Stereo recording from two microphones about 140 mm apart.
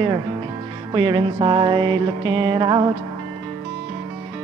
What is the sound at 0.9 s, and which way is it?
Mantra, 35° right (ahead or behind).